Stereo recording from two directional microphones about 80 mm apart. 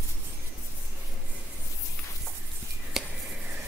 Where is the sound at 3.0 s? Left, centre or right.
Centre.